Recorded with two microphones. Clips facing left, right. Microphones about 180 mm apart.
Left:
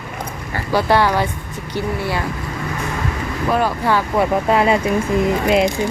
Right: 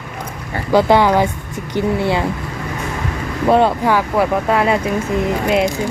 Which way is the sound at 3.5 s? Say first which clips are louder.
Right 6 dB; 25° right (ahead or behind).